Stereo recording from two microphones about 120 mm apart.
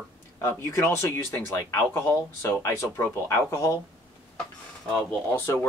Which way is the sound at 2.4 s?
25° left (ahead or behind).